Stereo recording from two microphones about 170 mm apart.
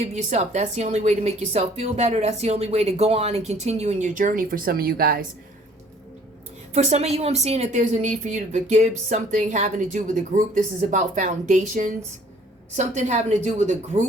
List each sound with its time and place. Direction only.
0.0 s a woman's voice: 40° right (ahead or behind); by 5.2 s 60° right (ahead or behind)
6.7 s speech: 40° right (ahead or behind)